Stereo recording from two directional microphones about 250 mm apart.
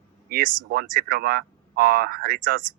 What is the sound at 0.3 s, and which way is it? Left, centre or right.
Speech, right.